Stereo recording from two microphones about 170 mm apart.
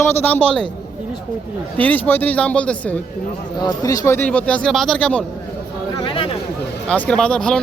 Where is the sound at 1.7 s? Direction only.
10° left (ahead or behind).